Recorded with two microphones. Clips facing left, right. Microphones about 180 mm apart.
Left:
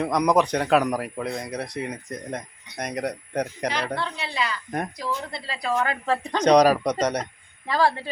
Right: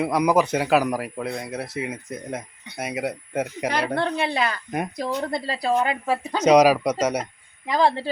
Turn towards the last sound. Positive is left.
turn(degrees=-15)  # may be behind; listen again after turning